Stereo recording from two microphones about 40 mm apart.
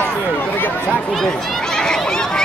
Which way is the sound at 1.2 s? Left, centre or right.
Centre.